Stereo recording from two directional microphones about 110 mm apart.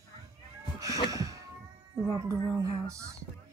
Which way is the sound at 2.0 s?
25° right (ahead or behind).